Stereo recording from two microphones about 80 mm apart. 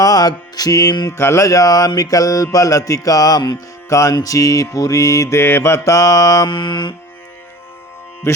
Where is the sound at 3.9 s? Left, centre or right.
Left.